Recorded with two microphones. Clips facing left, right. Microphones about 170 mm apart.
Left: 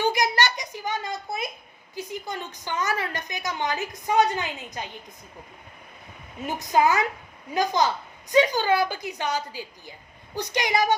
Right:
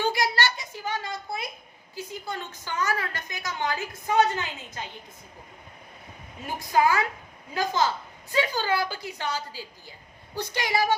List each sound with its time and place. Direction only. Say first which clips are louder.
0.0 s a sound: left 2 dB; 15° left (ahead or behind)
2.0 s a woman's voice: left 2 dB; 15° left (ahead or behind)
6.4 s a woman's voice: left 2 dB; 20° left (ahead or behind)